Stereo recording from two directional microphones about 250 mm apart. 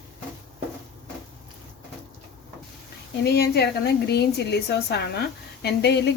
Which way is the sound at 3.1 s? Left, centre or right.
Left.